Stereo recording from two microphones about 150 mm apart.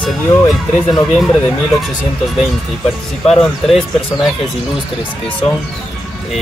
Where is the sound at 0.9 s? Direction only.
Centre (ahead or behind).